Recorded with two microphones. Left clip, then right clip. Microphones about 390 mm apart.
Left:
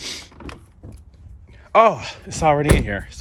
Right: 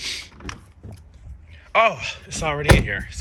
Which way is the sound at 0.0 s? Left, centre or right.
Centre.